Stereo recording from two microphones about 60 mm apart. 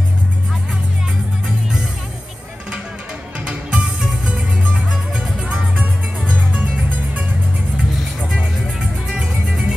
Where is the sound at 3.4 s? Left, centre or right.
Centre.